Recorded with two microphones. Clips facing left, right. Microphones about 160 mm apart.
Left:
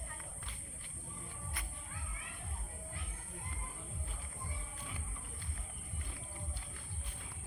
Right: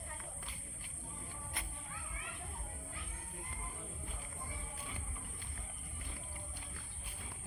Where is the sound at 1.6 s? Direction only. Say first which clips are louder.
Right 4 dB; 25° right (ahead or behind).